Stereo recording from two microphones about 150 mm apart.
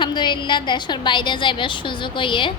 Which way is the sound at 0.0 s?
30° left (ahead or behind).